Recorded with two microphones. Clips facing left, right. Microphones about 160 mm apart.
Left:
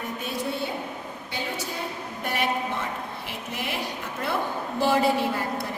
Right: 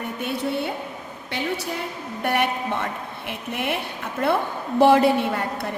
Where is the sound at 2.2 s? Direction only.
60° right (ahead or behind).